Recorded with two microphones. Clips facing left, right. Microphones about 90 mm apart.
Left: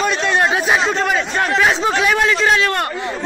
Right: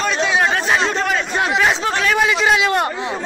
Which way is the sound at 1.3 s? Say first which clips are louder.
Left 1 dB; 10° right (ahead or behind).